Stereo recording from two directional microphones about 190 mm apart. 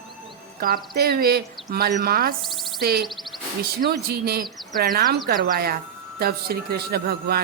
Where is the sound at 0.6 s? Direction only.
55° right (ahead or behind).